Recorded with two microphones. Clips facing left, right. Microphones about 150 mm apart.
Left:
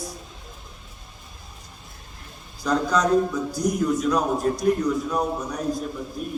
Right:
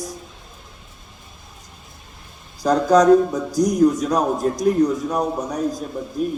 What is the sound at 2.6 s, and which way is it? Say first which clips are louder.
A man's voice: right 8 dB; 45° right (ahead or behind).